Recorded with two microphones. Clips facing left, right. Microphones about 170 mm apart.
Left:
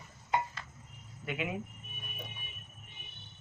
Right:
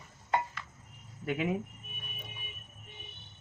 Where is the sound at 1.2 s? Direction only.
40° right (ahead or behind).